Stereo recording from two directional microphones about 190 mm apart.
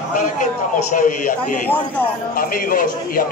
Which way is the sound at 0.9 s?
45° left (ahead or behind).